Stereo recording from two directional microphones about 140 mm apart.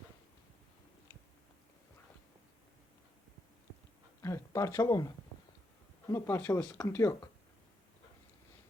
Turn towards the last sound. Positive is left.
turn(degrees=20)  # may be behind; listen again after turning